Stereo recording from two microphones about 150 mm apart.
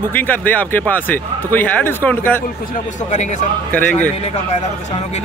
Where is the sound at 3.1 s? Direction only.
50° left (ahead or behind).